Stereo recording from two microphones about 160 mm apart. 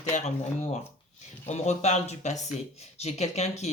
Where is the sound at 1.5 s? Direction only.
45° left (ahead or behind).